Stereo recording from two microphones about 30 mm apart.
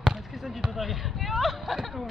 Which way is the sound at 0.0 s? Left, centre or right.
Right.